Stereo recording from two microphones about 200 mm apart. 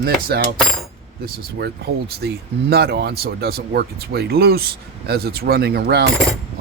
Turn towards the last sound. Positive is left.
turn(degrees=-55)  # may be behind; listen again after turning